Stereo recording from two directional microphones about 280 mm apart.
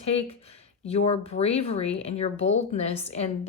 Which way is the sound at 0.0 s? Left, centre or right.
Left.